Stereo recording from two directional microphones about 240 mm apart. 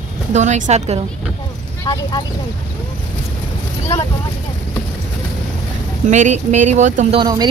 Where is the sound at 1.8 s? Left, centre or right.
Centre.